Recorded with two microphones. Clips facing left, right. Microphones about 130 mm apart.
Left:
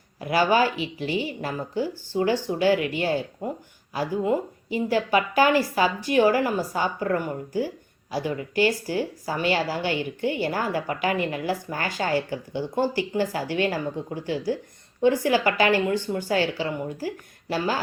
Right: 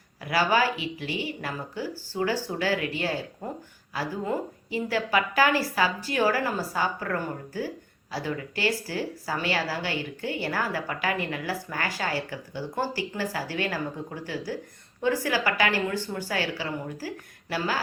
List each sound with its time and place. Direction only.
0.2 s speech: 25° left (ahead or behind)
15.0 s speech: 25° left (ahead or behind)